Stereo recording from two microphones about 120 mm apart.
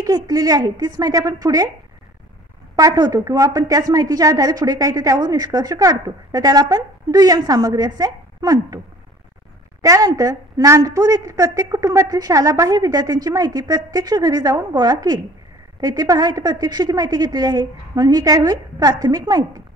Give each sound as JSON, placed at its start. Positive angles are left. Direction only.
{"t": 0.0, "sound": "a woman's voice", "side_deg": -30}
{"t": 2.7, "sound": "a woman's voice", "side_deg": -30}
{"t": 9.8, "sound": "a woman's voice", "side_deg": -30}